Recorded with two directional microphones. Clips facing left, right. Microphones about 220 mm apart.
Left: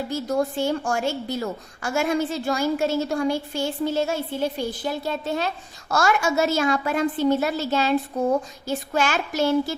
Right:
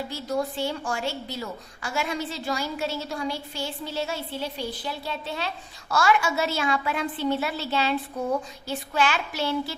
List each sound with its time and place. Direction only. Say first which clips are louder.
0.1 s a woman's voice: left 6 dB; 45° left (ahead or behind)